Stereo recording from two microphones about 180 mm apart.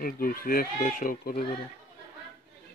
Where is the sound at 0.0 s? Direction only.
55° left (ahead or behind).